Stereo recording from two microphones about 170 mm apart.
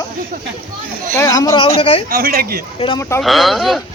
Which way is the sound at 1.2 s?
20° left (ahead or behind).